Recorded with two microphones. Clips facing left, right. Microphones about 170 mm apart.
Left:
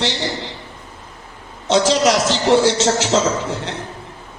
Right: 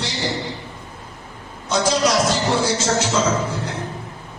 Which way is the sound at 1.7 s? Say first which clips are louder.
Left 4 dB; 75° left (ahead or behind).